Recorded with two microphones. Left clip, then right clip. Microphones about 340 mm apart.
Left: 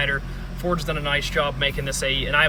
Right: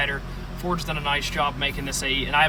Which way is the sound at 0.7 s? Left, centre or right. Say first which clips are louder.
Left 1 dB; centre.